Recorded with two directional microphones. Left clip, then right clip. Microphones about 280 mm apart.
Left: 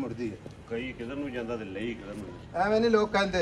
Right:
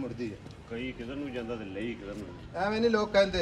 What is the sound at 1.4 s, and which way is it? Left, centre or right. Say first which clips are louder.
A man's voice: left 2 dB; left.